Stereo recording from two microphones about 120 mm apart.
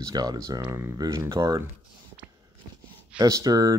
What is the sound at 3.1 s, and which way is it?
Speech, 30° right (ahead or behind).